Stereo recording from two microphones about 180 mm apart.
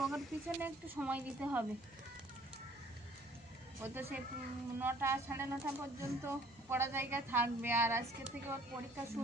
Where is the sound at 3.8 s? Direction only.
15° right (ahead or behind).